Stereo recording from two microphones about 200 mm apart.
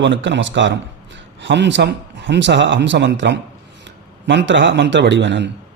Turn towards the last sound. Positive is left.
turn(degrees=-60)  # may be behind; listen again after turning